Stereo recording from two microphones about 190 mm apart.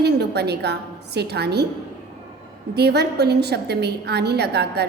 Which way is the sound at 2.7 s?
60° right (ahead or behind).